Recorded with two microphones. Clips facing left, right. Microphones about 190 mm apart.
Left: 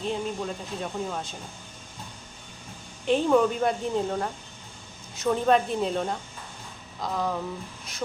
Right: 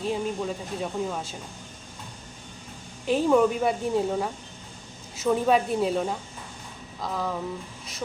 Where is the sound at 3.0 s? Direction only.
5° right (ahead or behind).